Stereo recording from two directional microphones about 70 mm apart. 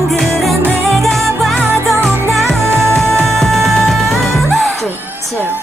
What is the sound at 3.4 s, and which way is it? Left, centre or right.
Music, centre.